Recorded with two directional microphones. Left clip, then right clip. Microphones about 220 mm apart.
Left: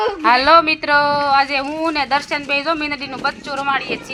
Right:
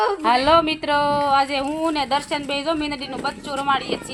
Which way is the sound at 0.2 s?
10° left (ahead or behind).